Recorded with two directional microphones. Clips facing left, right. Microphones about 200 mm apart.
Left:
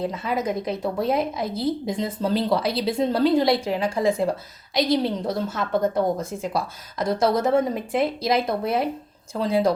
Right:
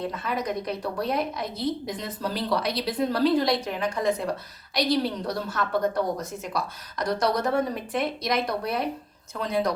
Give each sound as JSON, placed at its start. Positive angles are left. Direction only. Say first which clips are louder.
{"t": 0.1, "sound": "a woman's voice", "louder": "left 4 dB", "side_deg": 25}